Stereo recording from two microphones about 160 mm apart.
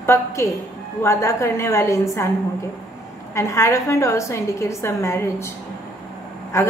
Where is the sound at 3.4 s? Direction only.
15° left (ahead or behind).